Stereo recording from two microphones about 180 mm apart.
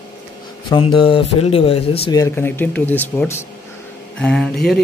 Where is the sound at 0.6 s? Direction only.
25° left (ahead or behind).